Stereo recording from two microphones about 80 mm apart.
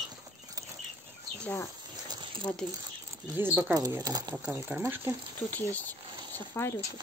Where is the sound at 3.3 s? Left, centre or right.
Right.